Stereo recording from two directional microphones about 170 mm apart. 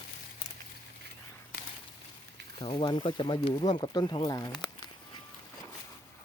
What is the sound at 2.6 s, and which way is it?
Speech, 30° left (ahead or behind).